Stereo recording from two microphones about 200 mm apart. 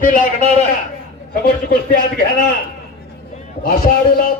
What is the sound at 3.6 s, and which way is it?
Speech, 45° left (ahead or behind).